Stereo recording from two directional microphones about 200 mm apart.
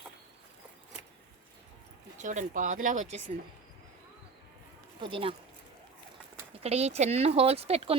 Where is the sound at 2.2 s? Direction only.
40° right (ahead or behind).